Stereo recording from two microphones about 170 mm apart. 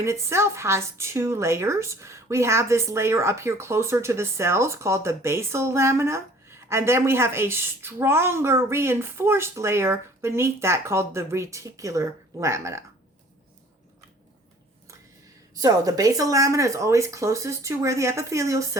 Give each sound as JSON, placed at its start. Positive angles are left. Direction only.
{"t": 0.0, "sound": "speech", "side_deg": -15}
{"t": 15.5, "sound": "speech", "side_deg": -20}